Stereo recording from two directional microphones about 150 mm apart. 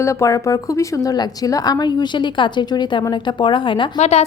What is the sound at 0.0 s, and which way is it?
A woman's voice, 20° left (ahead or behind).